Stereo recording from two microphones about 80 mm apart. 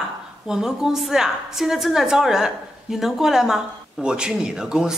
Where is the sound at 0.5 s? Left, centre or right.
Centre.